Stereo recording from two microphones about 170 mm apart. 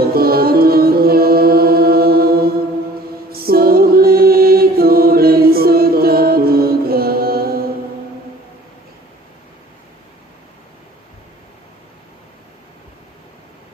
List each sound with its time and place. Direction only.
0.0 s music: 65° right (ahead or behind)